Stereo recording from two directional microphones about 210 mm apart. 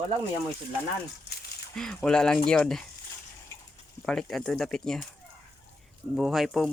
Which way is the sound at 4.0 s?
Centre (ahead or behind).